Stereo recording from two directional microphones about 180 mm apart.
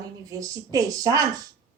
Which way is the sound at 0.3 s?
20° right (ahead or behind).